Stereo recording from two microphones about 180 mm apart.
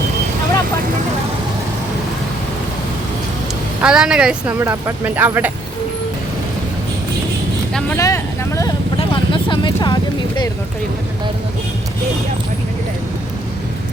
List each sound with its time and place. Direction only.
3.8 s speech: 5° right (ahead or behind)
7.7 s speech: 5° left (ahead or behind)
7.9 s speech: 15° left (ahead or behind)
9.0 s speech: 25° left (ahead or behind)